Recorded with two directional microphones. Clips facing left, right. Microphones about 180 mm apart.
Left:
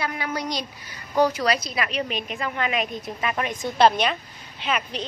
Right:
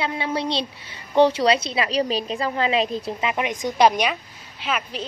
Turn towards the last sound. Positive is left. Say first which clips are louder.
# even
turn(degrees=-5)  # may be behind; listen again after turning